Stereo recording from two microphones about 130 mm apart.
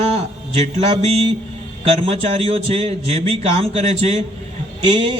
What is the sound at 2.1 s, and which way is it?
A man's voice, 55° right (ahead or behind).